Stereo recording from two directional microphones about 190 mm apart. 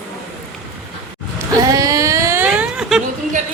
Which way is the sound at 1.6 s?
20° right (ahead or behind).